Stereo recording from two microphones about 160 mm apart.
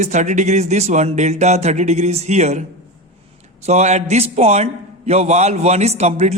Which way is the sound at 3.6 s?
45° right (ahead or behind).